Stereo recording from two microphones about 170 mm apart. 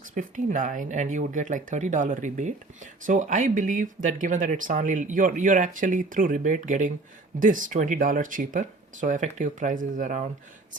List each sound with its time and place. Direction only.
0.1 s speech: 50° right (ahead or behind)